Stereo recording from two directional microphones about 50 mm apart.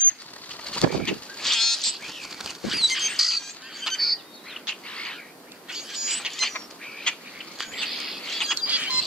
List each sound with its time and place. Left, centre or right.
0.7 s bird: centre
1.4 s frog: centre
2.3 s patter: centre
3.2 s bird: centre
4.6 s bird: centre
5.7 s a sound: centre
6.5 s duck: centre
7.3 s owl: centre
7.9 s rodents: centre
8.6 s a sound: right